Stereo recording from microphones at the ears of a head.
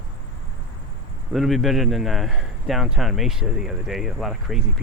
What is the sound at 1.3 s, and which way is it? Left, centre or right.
Speech, centre.